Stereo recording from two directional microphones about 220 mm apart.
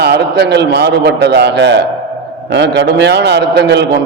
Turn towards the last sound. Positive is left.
turn(degrees=-50)  # may be behind; listen again after turning